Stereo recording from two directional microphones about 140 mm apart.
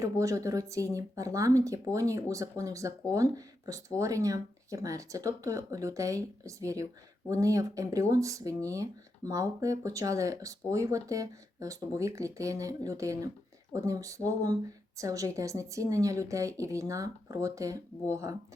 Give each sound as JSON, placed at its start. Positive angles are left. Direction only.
{"t": 0.0, "sound": "speech", "side_deg": -25}